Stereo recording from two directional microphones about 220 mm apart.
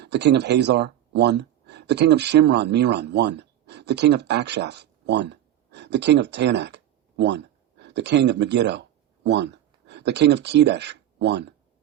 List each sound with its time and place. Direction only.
0.0 s speech: 50° right (ahead or behind)